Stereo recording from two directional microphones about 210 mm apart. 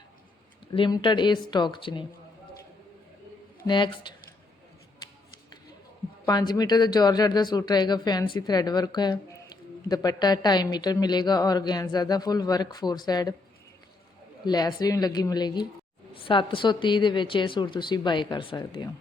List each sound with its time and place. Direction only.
0.8 s speech: 20° left (ahead or behind)
3.7 s speech: 25° left (ahead or behind)
6.2 s speech: 20° left (ahead or behind)
14.4 s speech: 20° left (ahead or behind)